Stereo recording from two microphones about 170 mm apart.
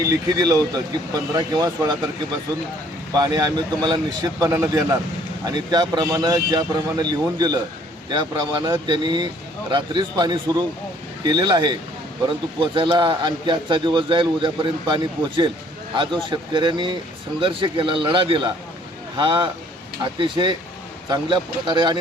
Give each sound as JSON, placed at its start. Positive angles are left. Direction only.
{"t": 0.0, "sound": "a man's voice", "side_deg": -20}
{"t": 3.2, "sound": "a man's voice", "side_deg": -25}